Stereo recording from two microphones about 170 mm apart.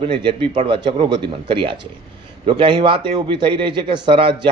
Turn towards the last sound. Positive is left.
turn(degrees=-30)  # may be behind; listen again after turning